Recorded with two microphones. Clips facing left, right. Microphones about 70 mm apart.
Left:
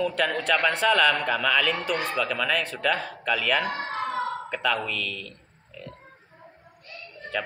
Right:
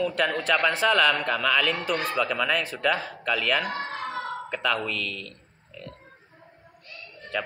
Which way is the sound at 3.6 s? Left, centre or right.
Left.